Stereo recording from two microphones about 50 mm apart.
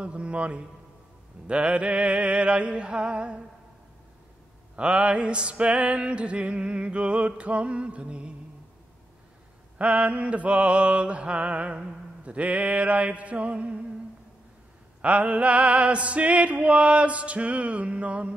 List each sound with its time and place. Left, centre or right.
0.0 s music: right
4.7 s music: right
9.8 s music: right
15.0 s music: right